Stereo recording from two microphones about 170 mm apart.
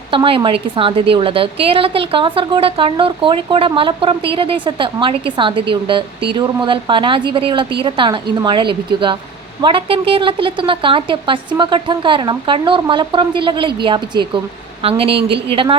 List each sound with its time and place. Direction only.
0.1 s a woman's voice: 30° right (ahead or behind)